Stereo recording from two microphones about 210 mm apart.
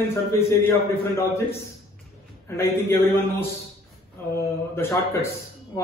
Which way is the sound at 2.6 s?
10° left (ahead or behind).